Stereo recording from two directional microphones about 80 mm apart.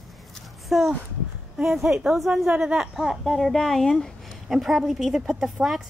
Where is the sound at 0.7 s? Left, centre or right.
Centre.